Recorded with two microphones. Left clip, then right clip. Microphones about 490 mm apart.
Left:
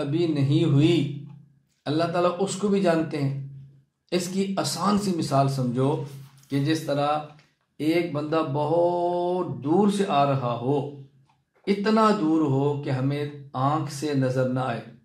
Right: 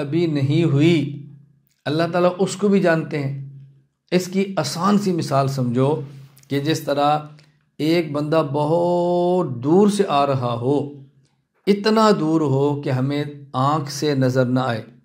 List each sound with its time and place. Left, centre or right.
0.0 s speech: right
6.5 s speech: right